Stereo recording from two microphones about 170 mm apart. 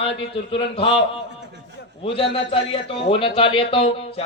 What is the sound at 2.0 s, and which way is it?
Speech, 30° left (ahead or behind).